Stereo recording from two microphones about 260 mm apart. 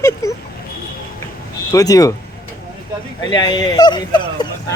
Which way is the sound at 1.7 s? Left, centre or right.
Centre.